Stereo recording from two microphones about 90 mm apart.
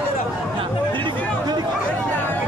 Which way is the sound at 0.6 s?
65° right (ahead or behind).